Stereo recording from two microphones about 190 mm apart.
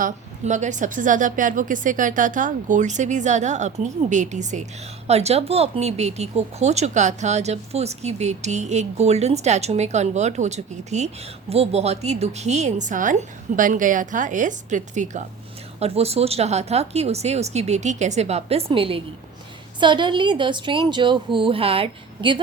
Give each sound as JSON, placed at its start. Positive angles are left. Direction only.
{"t": 0.0, "sound": "a woman's voice", "side_deg": -40}